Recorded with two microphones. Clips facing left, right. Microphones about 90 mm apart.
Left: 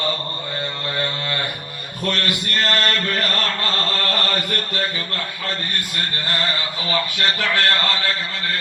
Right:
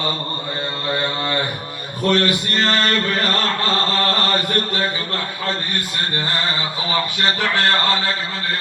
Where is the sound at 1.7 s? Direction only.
25° right (ahead or behind).